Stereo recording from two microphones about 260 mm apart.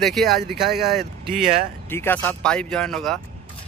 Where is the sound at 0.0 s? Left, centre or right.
Centre.